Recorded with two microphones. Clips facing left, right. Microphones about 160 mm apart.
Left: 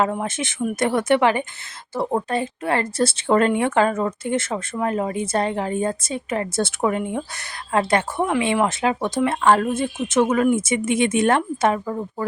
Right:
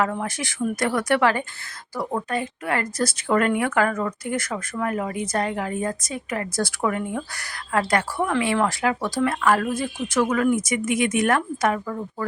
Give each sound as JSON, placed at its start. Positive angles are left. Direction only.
{"t": 0.0, "sound": "a woman's voice", "side_deg": 20}